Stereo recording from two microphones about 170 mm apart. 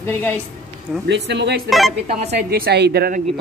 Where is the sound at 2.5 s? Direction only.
75° right (ahead or behind).